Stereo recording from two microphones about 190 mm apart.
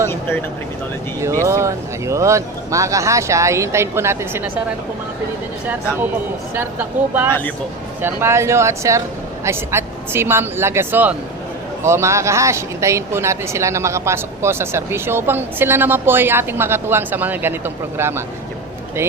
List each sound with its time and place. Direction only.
1.5 s speech: 15° right (ahead or behind)
6.6 s a woman's voice: 10° right (ahead or behind)